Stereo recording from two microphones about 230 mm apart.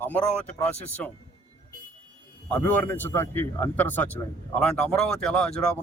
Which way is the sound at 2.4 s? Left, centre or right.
Centre.